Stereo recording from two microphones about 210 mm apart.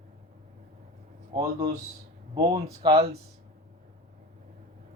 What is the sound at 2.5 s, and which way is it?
Speech, 30° right (ahead or behind).